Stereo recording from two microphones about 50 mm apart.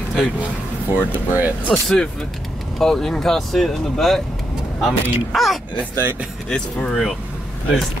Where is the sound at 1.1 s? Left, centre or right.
Right.